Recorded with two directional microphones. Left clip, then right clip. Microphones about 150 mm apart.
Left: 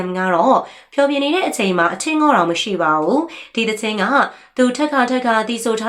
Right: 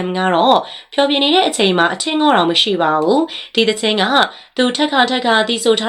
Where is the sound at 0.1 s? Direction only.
20° right (ahead or behind).